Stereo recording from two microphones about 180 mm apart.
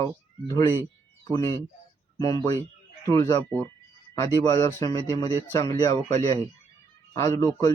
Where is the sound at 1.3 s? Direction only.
15° left (ahead or behind).